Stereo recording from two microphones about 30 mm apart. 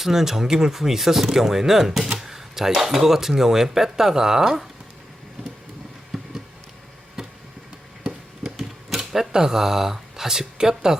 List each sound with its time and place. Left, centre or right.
0.0 s speech: centre
6.1 s a sound: centre
8.4 s typewriter: centre